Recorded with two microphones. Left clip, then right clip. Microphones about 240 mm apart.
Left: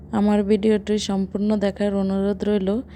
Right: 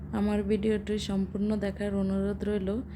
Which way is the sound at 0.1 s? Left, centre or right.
Left.